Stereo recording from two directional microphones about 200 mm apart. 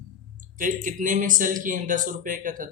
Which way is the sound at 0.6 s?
40° right (ahead or behind).